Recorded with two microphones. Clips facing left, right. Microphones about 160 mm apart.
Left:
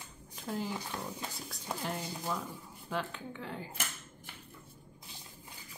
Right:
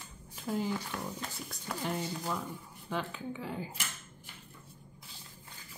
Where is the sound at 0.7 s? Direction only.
15° left (ahead or behind).